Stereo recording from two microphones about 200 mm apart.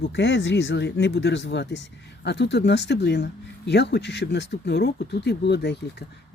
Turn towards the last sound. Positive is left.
turn(degrees=55)  # may be behind; listen again after turning